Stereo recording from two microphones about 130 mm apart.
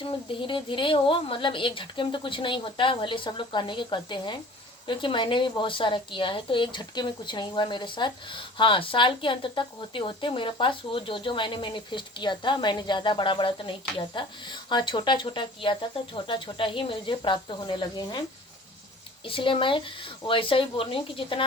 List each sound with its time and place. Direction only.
0.0 s a woman's voice: 40° left (ahead or behind)
19.2 s a woman's voice: 40° left (ahead or behind)